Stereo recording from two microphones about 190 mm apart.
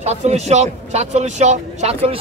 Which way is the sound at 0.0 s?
35° right (ahead or behind).